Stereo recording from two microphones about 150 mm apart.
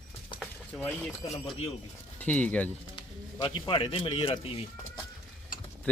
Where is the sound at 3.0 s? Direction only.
35° left (ahead or behind).